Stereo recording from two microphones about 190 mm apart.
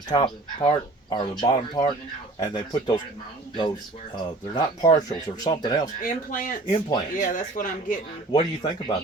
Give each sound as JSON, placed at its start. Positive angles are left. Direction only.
{"t": 0.1, "sound": "speech", "side_deg": 25}
{"t": 4.1, "sound": "speech", "side_deg": 20}
{"t": 5.8, "sound": "speech", "side_deg": 45}
{"t": 6.7, "sound": "speech", "side_deg": 20}
{"t": 7.2, "sound": "speech", "side_deg": 45}
{"t": 8.3, "sound": "speech", "side_deg": 25}